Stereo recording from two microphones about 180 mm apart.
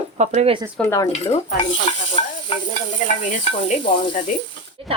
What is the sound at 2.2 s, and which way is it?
Stir, 30° left (ahead or behind).